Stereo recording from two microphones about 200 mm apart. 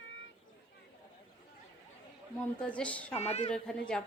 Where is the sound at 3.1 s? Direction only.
30° left (ahead or behind).